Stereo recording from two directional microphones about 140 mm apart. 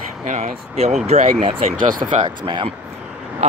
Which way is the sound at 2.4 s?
35° right (ahead or behind).